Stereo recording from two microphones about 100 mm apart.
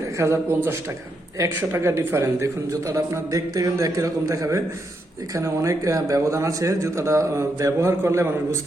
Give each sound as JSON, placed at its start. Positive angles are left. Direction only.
{"t": 0.2, "sound": "a man's voice", "side_deg": -25}